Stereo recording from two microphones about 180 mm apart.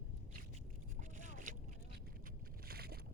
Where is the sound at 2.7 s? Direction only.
60° right (ahead or behind).